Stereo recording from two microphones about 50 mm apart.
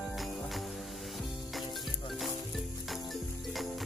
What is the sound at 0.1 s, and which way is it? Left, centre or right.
Music, centre.